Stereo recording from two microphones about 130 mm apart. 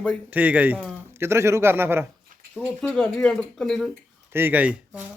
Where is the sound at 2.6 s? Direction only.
10° left (ahead or behind).